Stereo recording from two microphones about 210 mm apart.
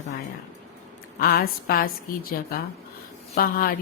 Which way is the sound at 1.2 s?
45° left (ahead or behind).